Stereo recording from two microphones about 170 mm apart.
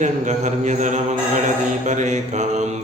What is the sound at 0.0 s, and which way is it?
Mantra, 45° right (ahead or behind).